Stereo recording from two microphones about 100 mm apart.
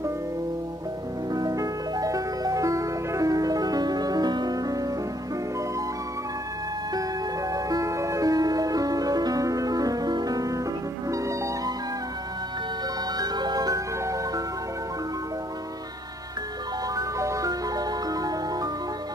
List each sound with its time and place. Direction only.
1.3 s music: 35° right (ahead or behind)
6.9 s music: 35° right (ahead or behind)
13.2 s music: 45° right (ahead or behind)
16.9 s music: 35° right (ahead or behind)